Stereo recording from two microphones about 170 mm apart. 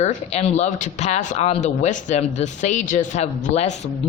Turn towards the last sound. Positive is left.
turn(degrees=40)  # may be behind; listen again after turning